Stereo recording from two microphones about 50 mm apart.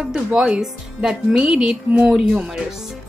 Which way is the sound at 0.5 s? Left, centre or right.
Centre.